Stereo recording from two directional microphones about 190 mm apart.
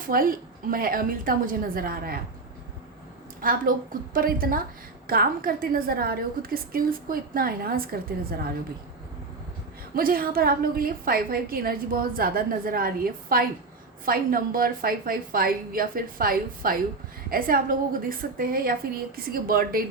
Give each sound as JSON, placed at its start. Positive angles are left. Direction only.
{"t": 0.1, "sound": "a woman's voice", "side_deg": -50}
{"t": 3.4, "sound": "a woman's voice", "side_deg": -50}
{"t": 9.9, "sound": "a woman's voice", "side_deg": -50}